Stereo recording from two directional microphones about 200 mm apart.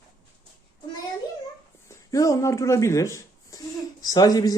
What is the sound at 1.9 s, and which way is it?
Speech, 15° left (ahead or behind).